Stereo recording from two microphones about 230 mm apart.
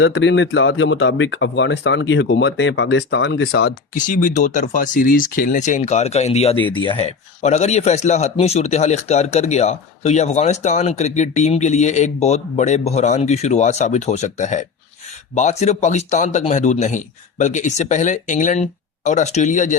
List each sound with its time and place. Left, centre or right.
0.0 s a man's voice: left